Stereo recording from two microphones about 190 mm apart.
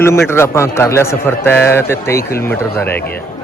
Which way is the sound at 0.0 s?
15° left (ahead or behind).